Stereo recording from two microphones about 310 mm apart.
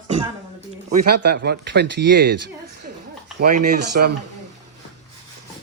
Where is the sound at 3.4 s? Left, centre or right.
Right.